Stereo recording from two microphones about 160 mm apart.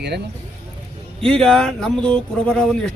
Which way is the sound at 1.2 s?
5° left (ahead or behind).